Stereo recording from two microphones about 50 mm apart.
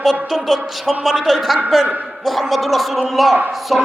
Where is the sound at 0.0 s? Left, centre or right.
Centre.